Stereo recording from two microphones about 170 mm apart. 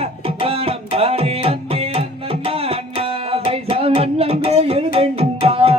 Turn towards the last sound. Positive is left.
turn(degrees=-35)  # may be behind; listen again after turning